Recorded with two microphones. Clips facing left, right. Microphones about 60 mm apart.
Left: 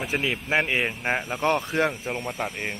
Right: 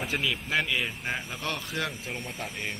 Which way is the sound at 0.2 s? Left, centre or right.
Left.